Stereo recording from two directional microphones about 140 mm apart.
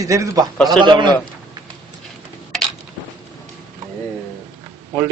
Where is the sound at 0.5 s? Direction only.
Centre (ahead or behind).